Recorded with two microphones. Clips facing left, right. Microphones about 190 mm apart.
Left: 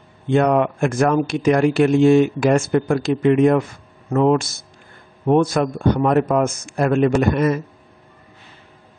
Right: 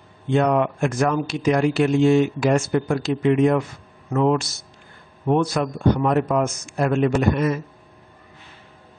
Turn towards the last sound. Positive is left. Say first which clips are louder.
# left 3 dB
turn(degrees=55)  # may be behind; listen again after turning